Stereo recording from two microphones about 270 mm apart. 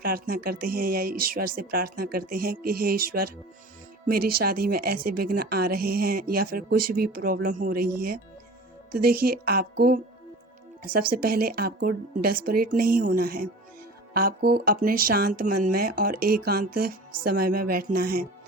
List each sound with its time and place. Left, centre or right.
0.0 s speech: right